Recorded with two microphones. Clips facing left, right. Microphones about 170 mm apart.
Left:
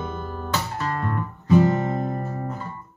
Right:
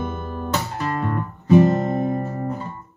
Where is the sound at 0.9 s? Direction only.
15° right (ahead or behind).